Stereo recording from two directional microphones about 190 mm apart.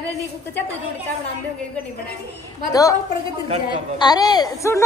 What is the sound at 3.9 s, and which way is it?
Speech, 20° left (ahead or behind).